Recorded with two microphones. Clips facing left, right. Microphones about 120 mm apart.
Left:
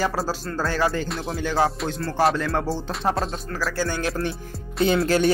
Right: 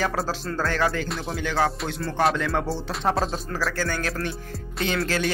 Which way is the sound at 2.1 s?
5° left (ahead or behind).